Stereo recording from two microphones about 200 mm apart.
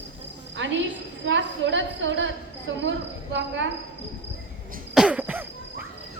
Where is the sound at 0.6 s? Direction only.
70° right (ahead or behind).